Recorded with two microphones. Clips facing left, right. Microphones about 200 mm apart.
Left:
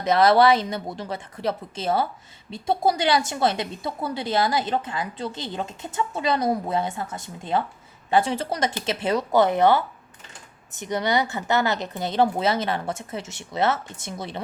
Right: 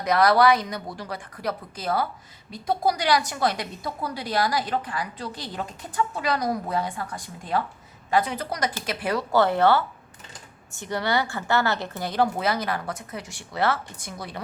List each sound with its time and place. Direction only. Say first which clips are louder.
0.0 s a woman's voice: left 2 dB; 25° left (ahead or behind)